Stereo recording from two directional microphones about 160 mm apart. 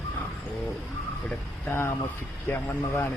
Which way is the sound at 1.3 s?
15° left (ahead or behind).